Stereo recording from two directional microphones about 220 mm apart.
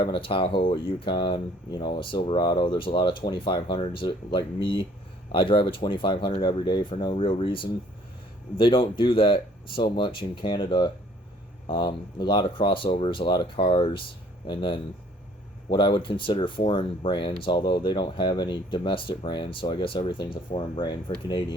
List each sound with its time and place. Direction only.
0.0 s speech: 20° left (ahead or behind)